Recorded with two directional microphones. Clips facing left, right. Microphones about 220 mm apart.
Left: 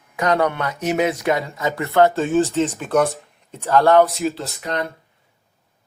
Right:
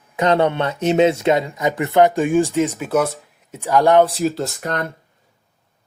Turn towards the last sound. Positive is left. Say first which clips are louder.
# right 2 dB
turn(degrees=-45)  # may be behind; listen again after turning